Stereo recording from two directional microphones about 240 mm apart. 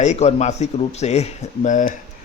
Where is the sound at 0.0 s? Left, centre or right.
Left.